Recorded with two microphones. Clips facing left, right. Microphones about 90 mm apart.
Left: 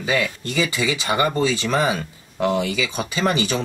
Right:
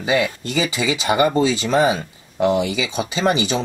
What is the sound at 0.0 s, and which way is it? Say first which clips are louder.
Speech: right 3 dB; 20° right (ahead or behind).